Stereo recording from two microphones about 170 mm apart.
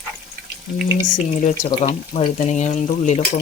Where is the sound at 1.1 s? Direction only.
45° left (ahead or behind).